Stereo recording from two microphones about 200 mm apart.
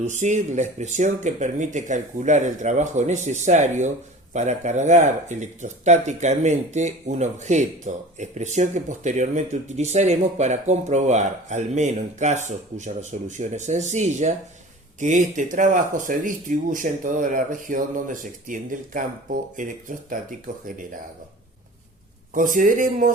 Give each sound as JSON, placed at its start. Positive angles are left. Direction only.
{"t": 0.0, "sound": "speech", "side_deg": -35}
{"t": 22.4, "sound": "speech", "side_deg": -40}